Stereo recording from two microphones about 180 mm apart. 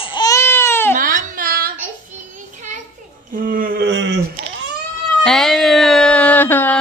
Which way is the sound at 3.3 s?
50° right (ahead or behind).